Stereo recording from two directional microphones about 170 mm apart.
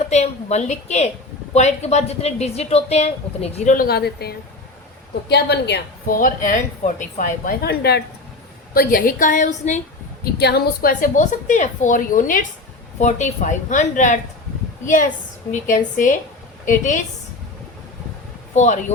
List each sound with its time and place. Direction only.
0.1 s speech: 40° left (ahead or behind)
3.8 s speech: 70° left (ahead or behind)
5.3 s a woman's voice: 80° left
6.1 s a woman's voice: 50° left (ahead or behind); by 8.0 s 75° left (ahead or behind)
8.7 s a woman's voice: 55° left (ahead or behind)
10.3 s a woman's voice: 70° left (ahead or behind); by 17.0 s 50° left (ahead or behind)
18.5 s a woman's voice: 45° left (ahead or behind)